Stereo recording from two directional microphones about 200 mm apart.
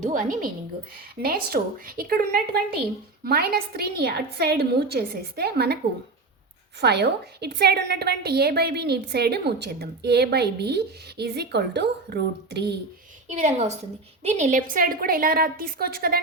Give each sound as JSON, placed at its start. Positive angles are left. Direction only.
{"t": 0.0, "sound": "a woman's voice", "side_deg": -40}
{"t": 6.8, "sound": "a woman's voice", "side_deg": -55}
{"t": 13.2, "sound": "a woman's voice", "side_deg": -35}